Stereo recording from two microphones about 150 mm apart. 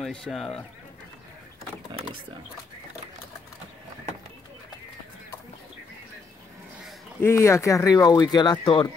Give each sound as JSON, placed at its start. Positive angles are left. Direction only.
{"t": 0.0, "sound": "speech", "side_deg": 5}
{"t": 7.2, "sound": "speech", "side_deg": 20}